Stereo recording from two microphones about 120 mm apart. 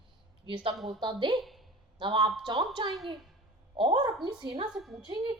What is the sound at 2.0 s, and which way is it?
Speech, 45° right (ahead or behind).